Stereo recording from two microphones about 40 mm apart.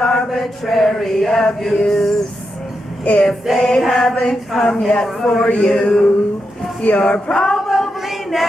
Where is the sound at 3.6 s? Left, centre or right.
Centre.